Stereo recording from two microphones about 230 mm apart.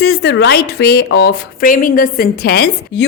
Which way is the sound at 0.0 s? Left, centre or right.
Left.